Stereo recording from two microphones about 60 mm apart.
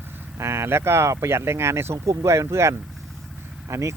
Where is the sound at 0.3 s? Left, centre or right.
Right.